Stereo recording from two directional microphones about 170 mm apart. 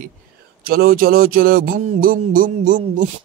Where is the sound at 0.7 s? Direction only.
60° right (ahead or behind).